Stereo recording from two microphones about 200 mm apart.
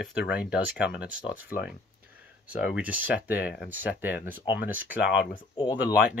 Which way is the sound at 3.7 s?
10° right (ahead or behind).